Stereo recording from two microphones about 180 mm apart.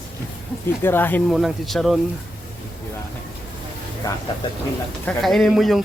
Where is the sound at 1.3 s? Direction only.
Centre (ahead or behind).